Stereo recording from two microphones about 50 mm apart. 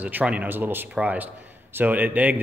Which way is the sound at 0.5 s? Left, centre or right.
Right.